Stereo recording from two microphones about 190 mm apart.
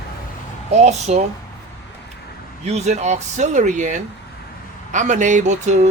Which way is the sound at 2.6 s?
35° right (ahead or behind).